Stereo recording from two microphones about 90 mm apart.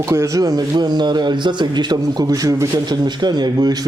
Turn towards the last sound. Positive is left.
turn(degrees=-50)  # may be behind; listen again after turning